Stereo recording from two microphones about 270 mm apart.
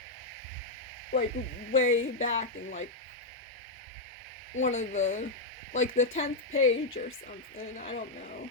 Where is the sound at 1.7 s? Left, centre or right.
Left.